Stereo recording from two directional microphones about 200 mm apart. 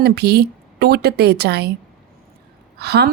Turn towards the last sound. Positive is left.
turn(degrees=-55)  # may be behind; listen again after turning